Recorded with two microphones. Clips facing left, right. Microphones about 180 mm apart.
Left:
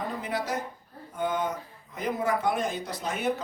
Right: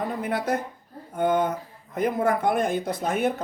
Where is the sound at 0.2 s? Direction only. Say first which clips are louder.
Right 5 dB; 55° right (ahead or behind).